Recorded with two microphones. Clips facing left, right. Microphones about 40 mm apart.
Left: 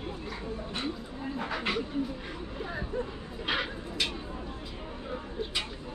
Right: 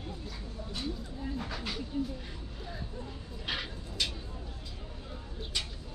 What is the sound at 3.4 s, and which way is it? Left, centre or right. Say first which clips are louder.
Speech: left 6 dB; centre.